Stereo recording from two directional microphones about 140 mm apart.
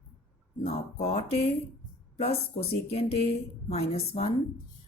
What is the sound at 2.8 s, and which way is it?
A woman's voice, 45° left (ahead or behind).